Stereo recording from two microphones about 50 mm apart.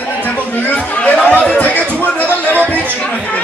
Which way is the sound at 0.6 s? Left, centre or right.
Left.